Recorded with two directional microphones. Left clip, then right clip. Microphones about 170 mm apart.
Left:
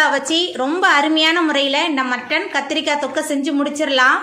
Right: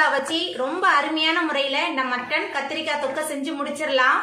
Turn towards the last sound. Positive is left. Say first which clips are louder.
# left 5 dB
turn(degrees=55)  # may be behind; listen again after turning